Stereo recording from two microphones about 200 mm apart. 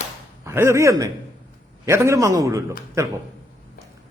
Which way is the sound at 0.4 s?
15° right (ahead or behind).